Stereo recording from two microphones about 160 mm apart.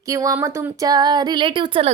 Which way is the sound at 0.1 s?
20° right (ahead or behind).